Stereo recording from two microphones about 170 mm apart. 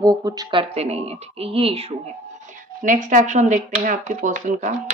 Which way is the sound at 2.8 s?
50° right (ahead or behind).